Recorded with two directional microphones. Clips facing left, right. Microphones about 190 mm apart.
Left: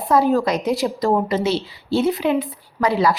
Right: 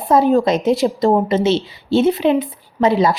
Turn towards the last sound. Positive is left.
turn(degrees=-20)  # may be behind; listen again after turning